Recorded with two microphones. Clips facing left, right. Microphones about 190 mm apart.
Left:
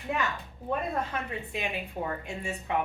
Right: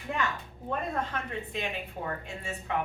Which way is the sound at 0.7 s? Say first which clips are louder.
Left 2 dB; 10° left (ahead or behind).